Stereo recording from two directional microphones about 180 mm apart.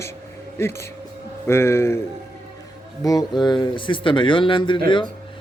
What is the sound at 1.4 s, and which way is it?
Speech, 15° left (ahead or behind).